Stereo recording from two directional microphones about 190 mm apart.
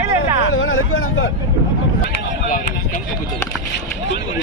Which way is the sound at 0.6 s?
90° left.